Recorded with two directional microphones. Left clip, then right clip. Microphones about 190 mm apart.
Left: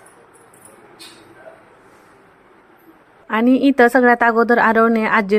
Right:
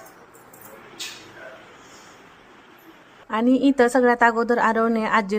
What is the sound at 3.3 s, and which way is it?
A woman's voice, 20° left (ahead or behind).